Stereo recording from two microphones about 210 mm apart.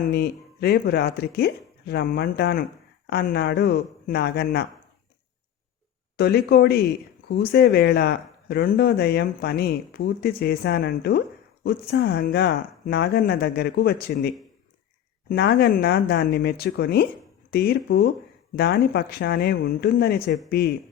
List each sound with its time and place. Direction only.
0.1 s speech: 50° left (ahead or behind)
6.1 s speech: 50° left (ahead or behind)